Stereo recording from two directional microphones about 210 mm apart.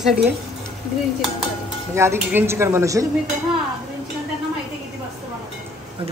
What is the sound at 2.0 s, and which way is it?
Speech, 10° right (ahead or behind).